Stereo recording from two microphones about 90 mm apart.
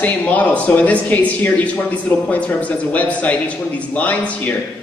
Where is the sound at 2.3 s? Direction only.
15° left (ahead or behind).